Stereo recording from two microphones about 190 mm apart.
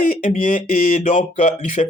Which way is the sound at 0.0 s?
45° left (ahead or behind).